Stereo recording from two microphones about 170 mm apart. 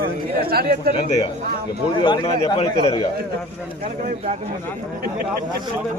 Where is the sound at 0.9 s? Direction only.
30° left (ahead or behind).